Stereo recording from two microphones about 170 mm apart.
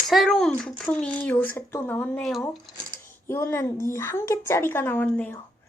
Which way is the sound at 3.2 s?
15° left (ahead or behind).